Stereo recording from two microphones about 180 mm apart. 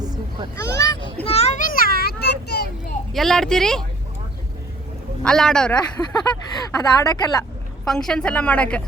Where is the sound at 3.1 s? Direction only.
Centre (ahead or behind).